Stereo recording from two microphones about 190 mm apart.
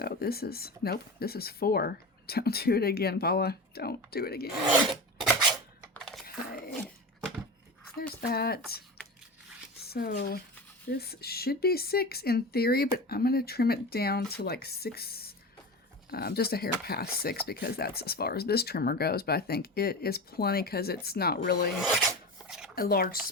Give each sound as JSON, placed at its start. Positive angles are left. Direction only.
{"t": 0.0, "sound": "speech", "side_deg": 55}
{"t": 4.9, "sound": "filing", "side_deg": 0}
{"t": 5.9, "sound": "a sound", "side_deg": 0}
{"t": 6.2, "sound": "a sound", "side_deg": 50}
{"t": 8.3, "sound": "speech", "side_deg": 55}
{"t": 9.8, "sound": "speech", "side_deg": 55}
{"t": 21.8, "sound": "speech", "side_deg": -5}
{"t": 22.4, "sound": "a sound", "side_deg": 0}
{"t": 22.7, "sound": "speech", "side_deg": 55}